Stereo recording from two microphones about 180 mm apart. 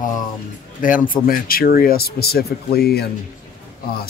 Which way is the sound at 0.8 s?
50° left (ahead or behind).